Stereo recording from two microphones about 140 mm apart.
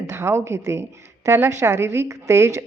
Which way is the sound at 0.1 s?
20° right (ahead or behind).